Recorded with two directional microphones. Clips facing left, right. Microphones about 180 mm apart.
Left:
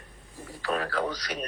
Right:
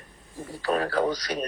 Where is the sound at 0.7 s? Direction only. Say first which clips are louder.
Right 5 dB; 35° right (ahead or behind).